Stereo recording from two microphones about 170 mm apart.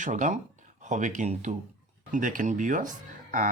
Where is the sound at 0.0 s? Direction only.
45° right (ahead or behind).